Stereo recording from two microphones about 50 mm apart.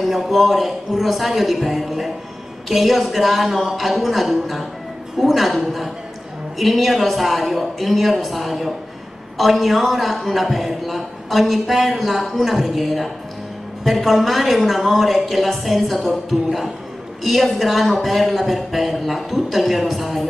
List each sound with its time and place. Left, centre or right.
0.0 s speech: centre